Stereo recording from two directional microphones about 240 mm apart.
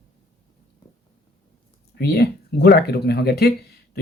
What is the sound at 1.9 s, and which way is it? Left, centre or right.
Speech, left.